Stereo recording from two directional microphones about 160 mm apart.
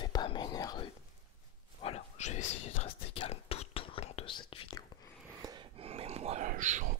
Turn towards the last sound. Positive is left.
turn(degrees=-50)  # may be behind; listen again after turning